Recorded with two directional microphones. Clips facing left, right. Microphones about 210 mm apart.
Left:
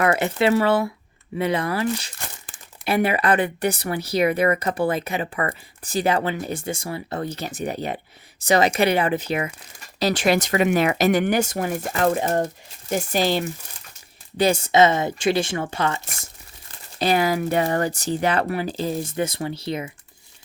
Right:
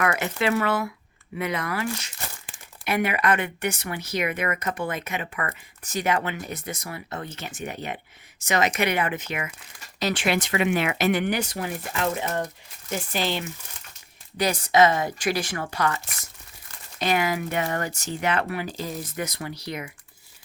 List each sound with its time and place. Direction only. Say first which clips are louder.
0.0 s speech: left 5 dB; 30° left (ahead or behind)
14.3 s speech: left 3 dB; 25° left (ahead or behind)